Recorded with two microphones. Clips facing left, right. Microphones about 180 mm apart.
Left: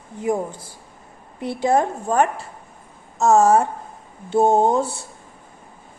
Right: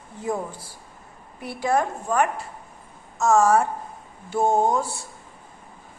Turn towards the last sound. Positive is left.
turn(degrees=25)  # may be behind; listen again after turning